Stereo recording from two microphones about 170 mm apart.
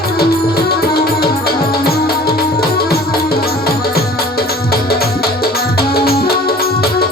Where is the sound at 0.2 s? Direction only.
65° left (ahead or behind).